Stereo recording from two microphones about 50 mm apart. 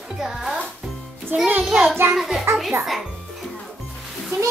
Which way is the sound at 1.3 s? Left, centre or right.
Right.